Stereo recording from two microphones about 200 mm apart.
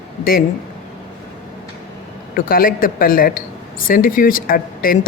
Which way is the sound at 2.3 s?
45° left (ahead or behind).